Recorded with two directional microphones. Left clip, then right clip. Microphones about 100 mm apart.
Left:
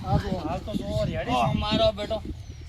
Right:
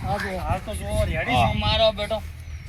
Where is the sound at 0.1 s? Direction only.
20° right (ahead or behind).